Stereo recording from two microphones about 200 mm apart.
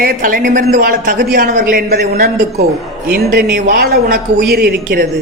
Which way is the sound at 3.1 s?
50° right (ahead or behind).